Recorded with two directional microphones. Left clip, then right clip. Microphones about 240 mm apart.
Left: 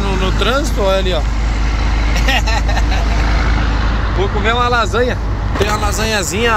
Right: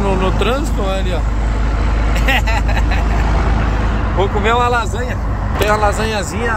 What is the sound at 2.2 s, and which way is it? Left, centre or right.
Speech, centre.